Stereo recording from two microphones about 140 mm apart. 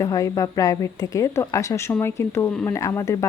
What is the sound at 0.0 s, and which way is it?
Speech, 25° left (ahead or behind).